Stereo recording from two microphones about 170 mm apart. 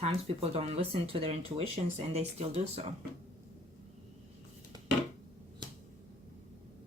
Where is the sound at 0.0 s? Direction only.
35° right (ahead or behind).